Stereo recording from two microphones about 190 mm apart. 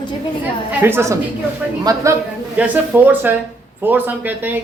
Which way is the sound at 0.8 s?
10° right (ahead or behind).